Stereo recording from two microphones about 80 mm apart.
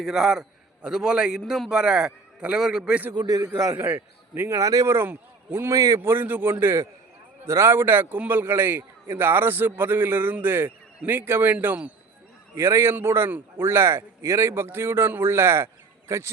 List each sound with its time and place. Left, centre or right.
0.0 s a man's voice: centre
3.2 s a man's voice: right
3.8 s a man's voice: right
4.4 s a man's voice: right
5.7 s a man's voice: right
6.1 s a man's voice: right
12.5 s a man's voice: right